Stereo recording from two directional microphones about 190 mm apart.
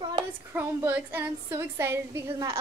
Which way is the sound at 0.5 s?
10° right (ahead or behind).